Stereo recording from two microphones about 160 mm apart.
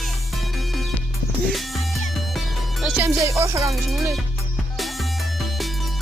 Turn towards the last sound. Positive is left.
turn(degrees=0)  # may be behind; listen again after turning